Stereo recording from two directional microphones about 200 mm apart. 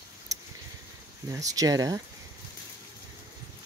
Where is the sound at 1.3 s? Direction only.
15° right (ahead or behind).